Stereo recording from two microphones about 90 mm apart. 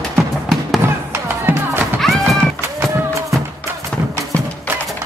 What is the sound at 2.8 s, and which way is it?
Run, 35° right (ahead or behind).